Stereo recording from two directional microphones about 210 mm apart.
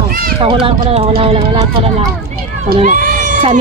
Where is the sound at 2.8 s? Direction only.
40° right (ahead or behind).